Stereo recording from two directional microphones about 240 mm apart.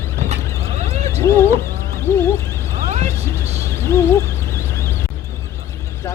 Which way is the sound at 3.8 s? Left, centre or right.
Centre.